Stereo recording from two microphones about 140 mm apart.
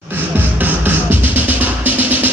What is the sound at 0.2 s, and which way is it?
Music, 15° right (ahead or behind).